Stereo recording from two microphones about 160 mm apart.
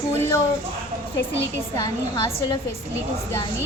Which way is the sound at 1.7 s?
20° left (ahead or behind).